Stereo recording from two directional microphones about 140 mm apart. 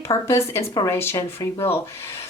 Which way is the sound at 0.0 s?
20° left (ahead or behind).